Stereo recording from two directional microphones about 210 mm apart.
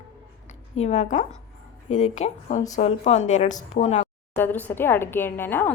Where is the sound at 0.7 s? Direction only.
30° left (ahead or behind).